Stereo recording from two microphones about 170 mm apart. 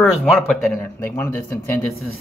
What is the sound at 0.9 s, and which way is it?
Speech, 10° left (ahead or behind).